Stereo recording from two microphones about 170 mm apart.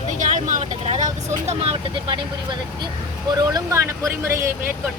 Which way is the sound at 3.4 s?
20° right (ahead or behind).